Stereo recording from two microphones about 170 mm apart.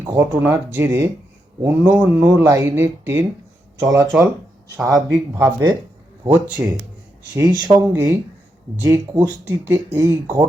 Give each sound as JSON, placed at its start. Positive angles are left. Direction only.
{"t": 0.0, "sound": "speech", "side_deg": -15}
{"t": 7.3, "sound": "speech", "side_deg": -25}
{"t": 8.8, "sound": "speech", "side_deg": -10}